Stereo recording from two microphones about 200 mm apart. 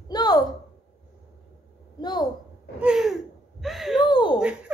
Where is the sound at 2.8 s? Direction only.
5° right (ahead or behind).